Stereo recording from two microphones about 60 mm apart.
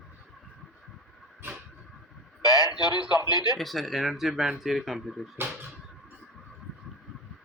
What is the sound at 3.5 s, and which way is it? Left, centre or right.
Speech, centre.